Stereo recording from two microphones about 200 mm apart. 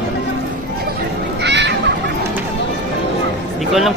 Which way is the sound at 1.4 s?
60° right (ahead or behind).